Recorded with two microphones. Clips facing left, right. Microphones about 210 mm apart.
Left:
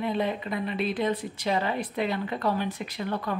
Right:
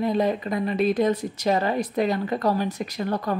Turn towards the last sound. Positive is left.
turn(degrees=-40)  # may be behind; listen again after turning